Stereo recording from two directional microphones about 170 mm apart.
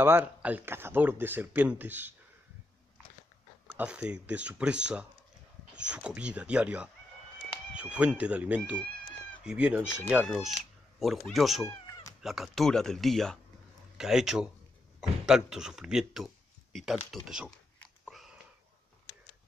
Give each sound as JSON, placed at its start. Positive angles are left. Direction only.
{"t": 0.0, "sound": "speech", "side_deg": -10}
{"t": 3.6, "sound": "speech", "side_deg": -5}
{"t": 11.6, "sound": "cat", "side_deg": 20}
{"t": 12.2, "sound": "speech", "side_deg": 0}
{"t": 17.7, "sound": "a sound", "side_deg": 5}